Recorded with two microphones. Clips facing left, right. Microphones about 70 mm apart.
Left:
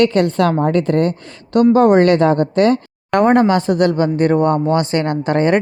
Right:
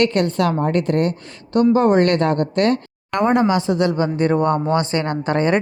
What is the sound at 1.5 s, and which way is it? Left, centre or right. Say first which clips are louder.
Speech: left 4 dB; left.